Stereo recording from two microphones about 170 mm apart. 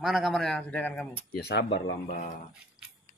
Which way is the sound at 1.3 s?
80° left.